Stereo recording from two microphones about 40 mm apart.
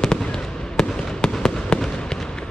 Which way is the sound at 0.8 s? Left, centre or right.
Centre.